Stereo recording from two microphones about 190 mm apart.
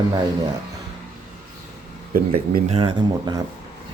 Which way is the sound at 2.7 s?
30° right (ahead or behind).